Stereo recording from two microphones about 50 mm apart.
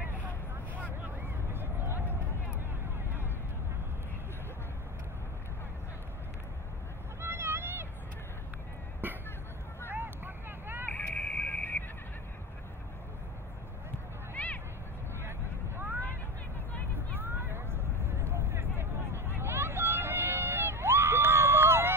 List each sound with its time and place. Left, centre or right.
1.0 s a sound: right
7.2 s vehicle: right
9.0 s a sound: right
9.8 s vehicle: right
10.9 s vehicle: left
14.3 s vehicle: left
15.2 s vehicle: right
17.2 s vehicle: right